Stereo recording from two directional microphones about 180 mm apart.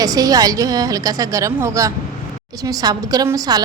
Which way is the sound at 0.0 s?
20° right (ahead or behind).